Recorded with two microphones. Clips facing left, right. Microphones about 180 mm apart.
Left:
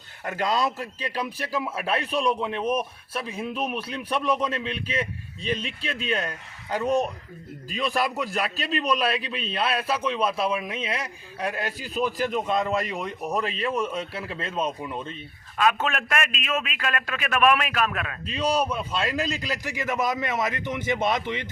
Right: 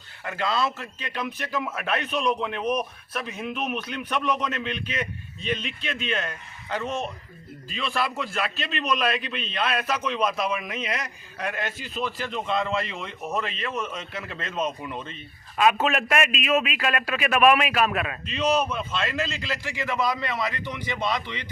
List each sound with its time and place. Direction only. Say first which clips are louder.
0.3 s a man's voice: left 1 dB; 40° left (ahead or behind)
14.8 s speech: left 2 dB; 5° left (ahead or behind)
15.5 s a man's voice: right 2 dB; 5° right (ahead or behind)
18.3 s a man's voice: even; 35° left (ahead or behind)